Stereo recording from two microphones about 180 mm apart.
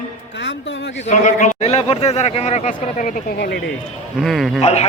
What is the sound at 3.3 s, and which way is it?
Speech, 65° left (ahead or behind).